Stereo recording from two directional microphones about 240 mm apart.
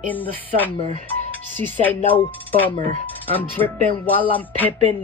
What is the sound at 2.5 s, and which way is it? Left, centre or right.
Speech, centre.